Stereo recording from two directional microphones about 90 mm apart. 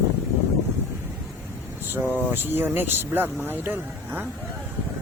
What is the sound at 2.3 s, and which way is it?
Speech, 25° right (ahead or behind).